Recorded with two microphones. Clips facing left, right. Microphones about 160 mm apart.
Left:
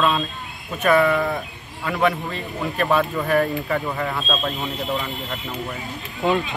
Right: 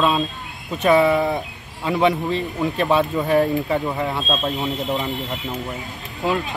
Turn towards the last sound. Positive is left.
turn(degrees=0)  # may be behind; listen again after turning